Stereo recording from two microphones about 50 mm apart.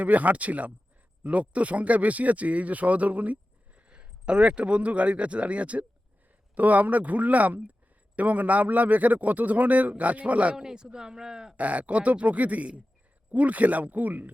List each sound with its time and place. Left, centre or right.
0.0 s a man's voice: right
10.6 s speech: centre
11.5 s a man's voice: right